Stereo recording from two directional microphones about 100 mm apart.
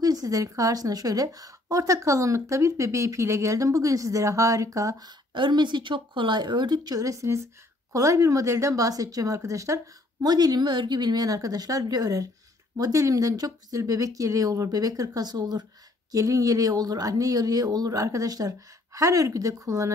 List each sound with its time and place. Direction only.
0.0 s a woman's voice: 40° right (ahead or behind)
5.3 s a woman's voice: 50° right (ahead or behind); by 9.8 s 30° right (ahead or behind)
10.2 s a woman's voice: 40° right (ahead or behind)